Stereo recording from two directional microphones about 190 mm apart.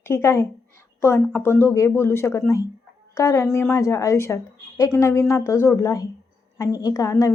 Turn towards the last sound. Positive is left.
turn(degrees=15)  # may be behind; listen again after turning